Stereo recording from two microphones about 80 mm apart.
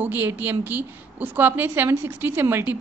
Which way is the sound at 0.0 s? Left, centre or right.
Right.